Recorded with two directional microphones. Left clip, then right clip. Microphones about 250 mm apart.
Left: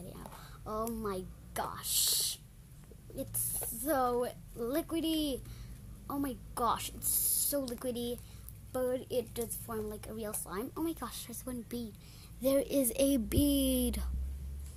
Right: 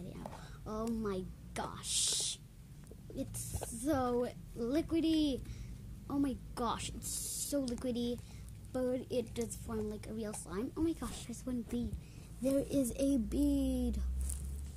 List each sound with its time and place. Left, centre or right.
0.7 s a woman's voice: left
12.4 s speech: left